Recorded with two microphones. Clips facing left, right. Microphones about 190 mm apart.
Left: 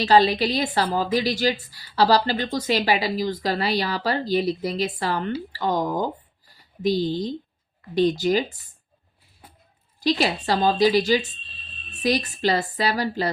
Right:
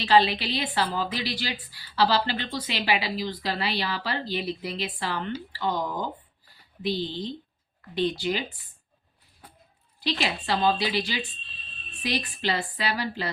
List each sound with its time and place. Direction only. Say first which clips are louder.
0.0 s a woman's voice: left 4 dB; 40° left (ahead or behind)
10.0 s a woman's voice: left 7 dB; 40° left (ahead or behind)